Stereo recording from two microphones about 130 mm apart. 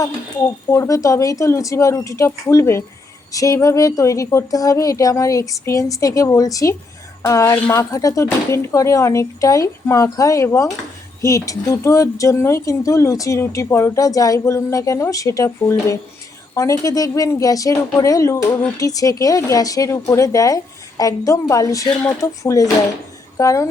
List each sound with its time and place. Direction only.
0.7 s speech: 25° left (ahead or behind)
16.6 s speech: 25° left (ahead or behind)